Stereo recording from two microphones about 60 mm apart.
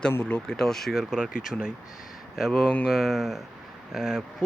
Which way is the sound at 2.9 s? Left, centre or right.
Centre.